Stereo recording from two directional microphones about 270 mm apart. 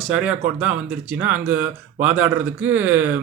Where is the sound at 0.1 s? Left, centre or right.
Centre.